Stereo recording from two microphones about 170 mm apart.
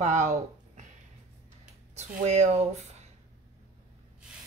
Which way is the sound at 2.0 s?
40° right (ahead or behind).